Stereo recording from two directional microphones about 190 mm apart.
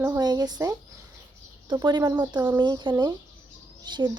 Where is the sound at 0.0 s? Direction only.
20° right (ahead or behind).